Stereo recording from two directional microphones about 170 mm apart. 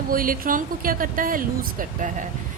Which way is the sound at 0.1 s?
55° right (ahead or behind).